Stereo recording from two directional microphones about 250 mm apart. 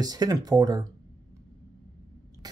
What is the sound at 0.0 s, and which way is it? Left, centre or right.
Speech, centre.